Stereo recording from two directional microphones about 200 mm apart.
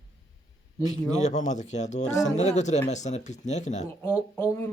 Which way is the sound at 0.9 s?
35° left (ahead or behind).